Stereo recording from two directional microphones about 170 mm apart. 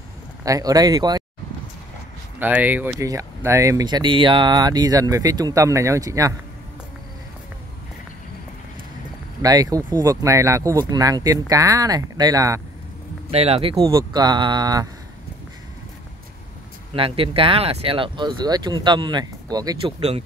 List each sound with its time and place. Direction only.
0.5 s speech: 20° right (ahead or behind)
2.3 s speech: 10° right (ahead or behind)
9.4 s speech: 20° right (ahead or behind)
13.3 s speech: 35° right (ahead or behind)
13.7 s speech: 20° right (ahead or behind)
16.9 s speech: 30° right (ahead or behind)